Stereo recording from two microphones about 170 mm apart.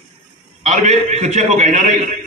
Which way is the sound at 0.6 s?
40° right (ahead or behind).